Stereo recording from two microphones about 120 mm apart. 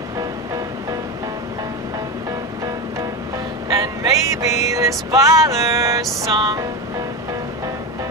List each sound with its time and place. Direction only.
3.6 s music: 30° right (ahead or behind)